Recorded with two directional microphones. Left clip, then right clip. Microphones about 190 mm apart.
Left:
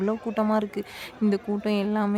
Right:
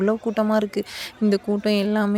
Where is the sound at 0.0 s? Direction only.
15° right (ahead or behind).